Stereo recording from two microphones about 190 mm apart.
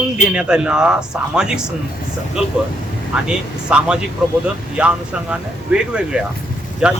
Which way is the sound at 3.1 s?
5° right (ahead or behind).